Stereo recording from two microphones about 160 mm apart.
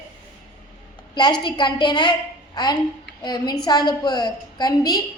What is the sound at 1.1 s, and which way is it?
A woman's voice, 25° left (ahead or behind).